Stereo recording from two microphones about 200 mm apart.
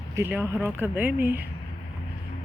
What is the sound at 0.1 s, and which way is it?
Speech, 10° right (ahead or behind).